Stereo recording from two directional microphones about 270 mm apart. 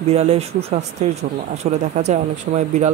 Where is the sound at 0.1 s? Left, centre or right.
Right.